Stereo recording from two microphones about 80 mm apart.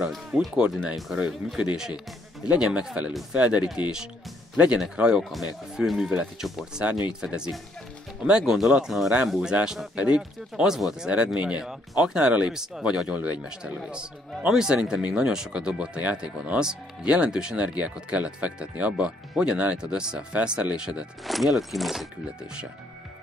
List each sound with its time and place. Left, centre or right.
0.3 s speech: centre
0.9 s speech: centre
21.3 s speech: centre